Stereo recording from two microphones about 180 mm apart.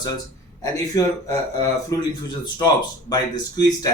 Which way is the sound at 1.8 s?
25° left (ahead or behind).